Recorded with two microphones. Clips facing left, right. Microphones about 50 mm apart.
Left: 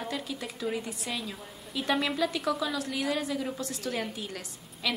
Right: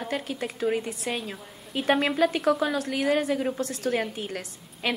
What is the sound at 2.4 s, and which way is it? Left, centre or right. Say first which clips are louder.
A woman's voice: right 6 dB; right.